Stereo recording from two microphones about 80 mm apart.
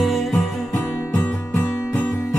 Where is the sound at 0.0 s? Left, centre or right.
Centre.